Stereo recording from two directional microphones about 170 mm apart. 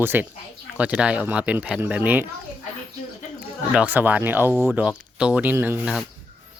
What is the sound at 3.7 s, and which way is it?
Speech, 10° right (ahead or behind).